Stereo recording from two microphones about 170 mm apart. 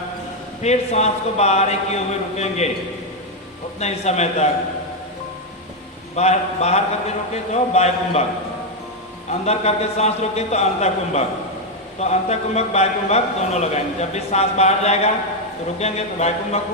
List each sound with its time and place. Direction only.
0.6 s a man's voice: 40° left (ahead or behind)
3.8 s a man's voice: 40° left (ahead or behind)
6.1 s a man's voice: 40° left (ahead or behind)
9.5 s a man's voice: 40° left (ahead or behind)